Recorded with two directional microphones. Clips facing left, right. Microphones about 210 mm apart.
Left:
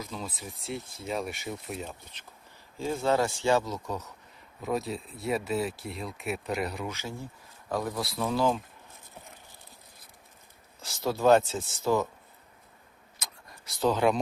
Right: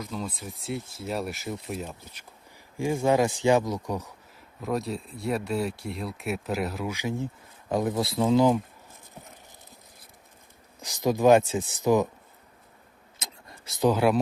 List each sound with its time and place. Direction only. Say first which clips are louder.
0.0 s speech: right 4 dB; centre (ahead or behind)
4.6 s speech: right 2 dB; centre (ahead or behind)
6.9 s speech: right 8 dB; 15° right (ahead or behind)
10.8 s speech: right 5 dB; 15° right (ahead or behind)
13.1 s vehicle: right 3 dB; 25° right (ahead or behind); by 14.2 s 10° right (ahead or behind)